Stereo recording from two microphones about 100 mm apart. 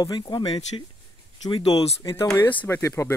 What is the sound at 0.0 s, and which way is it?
Speech, 45° left (ahead or behind).